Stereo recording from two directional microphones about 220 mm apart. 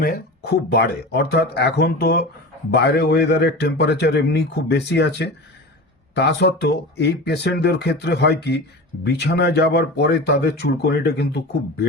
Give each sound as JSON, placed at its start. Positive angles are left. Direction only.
{"t": 0.0, "sound": "speech", "side_deg": 45}